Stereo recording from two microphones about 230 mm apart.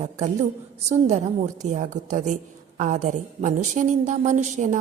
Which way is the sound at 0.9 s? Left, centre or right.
Right.